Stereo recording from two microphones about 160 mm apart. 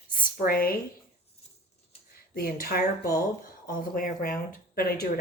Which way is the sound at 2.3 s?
70° left (ahead or behind).